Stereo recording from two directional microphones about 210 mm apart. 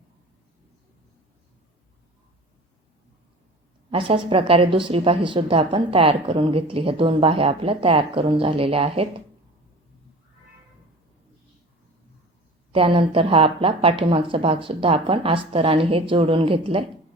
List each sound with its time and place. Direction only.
3.9 s a woman's voice: 25° right (ahead or behind)
12.7 s a woman's voice: 25° right (ahead or behind)